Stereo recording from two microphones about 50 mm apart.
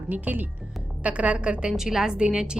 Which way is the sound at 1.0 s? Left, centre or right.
Right.